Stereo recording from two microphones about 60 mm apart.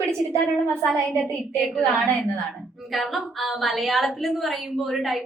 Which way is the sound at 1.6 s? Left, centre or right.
Centre.